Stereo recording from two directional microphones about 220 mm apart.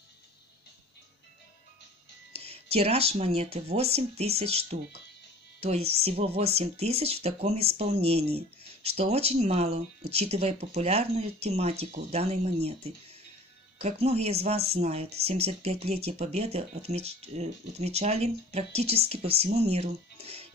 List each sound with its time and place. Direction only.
2.4 s speech: 25° right (ahead or behind)